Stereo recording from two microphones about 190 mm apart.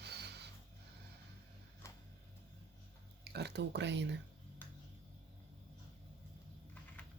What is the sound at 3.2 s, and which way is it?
Speech, 60° right (ahead or behind).